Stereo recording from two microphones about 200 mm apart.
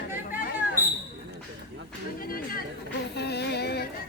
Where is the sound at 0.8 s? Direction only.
10° right (ahead or behind).